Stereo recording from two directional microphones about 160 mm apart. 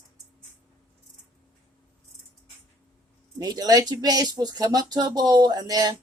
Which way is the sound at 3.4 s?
25° right (ahead or behind).